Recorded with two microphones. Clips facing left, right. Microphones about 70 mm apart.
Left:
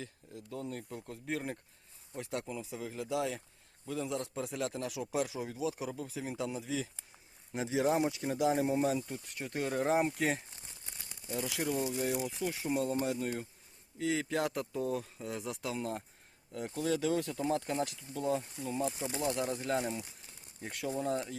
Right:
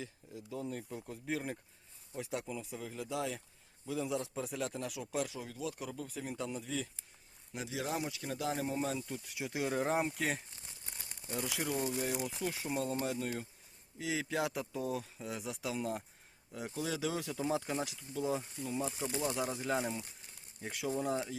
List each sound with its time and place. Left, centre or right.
0.0 s a man's voice: centre
7.5 s speech: left; by 9.2 s centre
9.2 s a man's voice: centre